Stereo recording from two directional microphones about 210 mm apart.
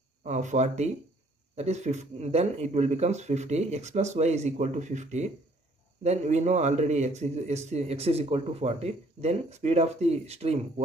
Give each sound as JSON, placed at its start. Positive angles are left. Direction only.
{"t": 0.2, "sound": "a man's voice", "side_deg": -35}